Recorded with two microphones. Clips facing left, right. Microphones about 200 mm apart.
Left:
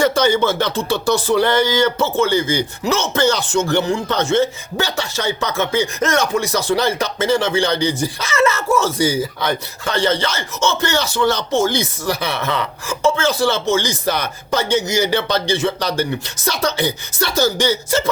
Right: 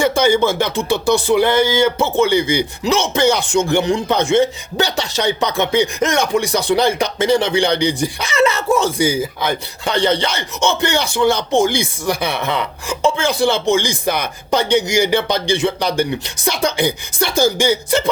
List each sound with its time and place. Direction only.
0.0 s speech: 10° right (ahead or behind)